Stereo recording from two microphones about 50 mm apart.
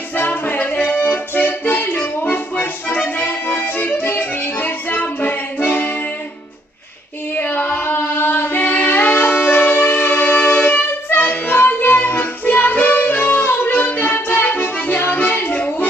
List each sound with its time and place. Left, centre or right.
0.2 s music: left
7.3 s singing: left
8.4 s shofar: left
11.5 s music: left